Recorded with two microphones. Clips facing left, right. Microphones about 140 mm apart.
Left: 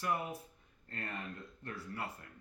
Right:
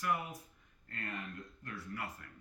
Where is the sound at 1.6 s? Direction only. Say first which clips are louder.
Left 2 dB; 25° left (ahead or behind).